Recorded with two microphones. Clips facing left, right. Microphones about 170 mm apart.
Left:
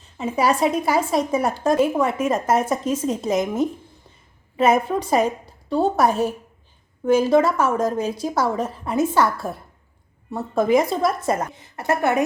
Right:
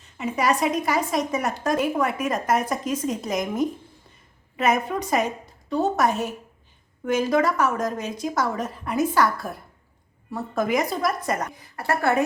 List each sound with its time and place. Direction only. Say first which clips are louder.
0.2 s a woman's voice: left 3 dB; 30° left (ahead or behind)